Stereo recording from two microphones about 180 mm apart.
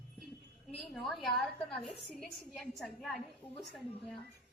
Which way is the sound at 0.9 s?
Centre (ahead or behind).